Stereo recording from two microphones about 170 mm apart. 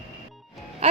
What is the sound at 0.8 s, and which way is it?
Music, 35° right (ahead or behind).